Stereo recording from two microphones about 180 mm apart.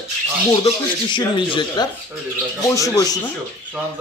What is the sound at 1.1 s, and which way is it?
Speech, 25° left (ahead or behind).